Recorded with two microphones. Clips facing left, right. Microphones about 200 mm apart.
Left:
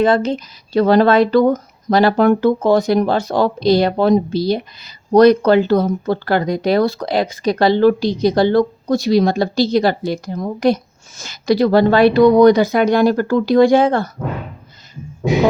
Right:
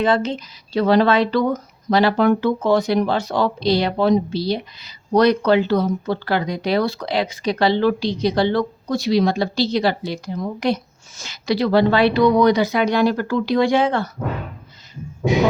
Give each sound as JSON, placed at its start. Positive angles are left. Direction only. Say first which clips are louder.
{"t": 0.0, "sound": "speech", "louder": "left 4 dB", "side_deg": 45}